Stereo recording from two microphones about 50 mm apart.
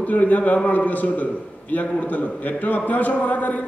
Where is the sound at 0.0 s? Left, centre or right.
Left.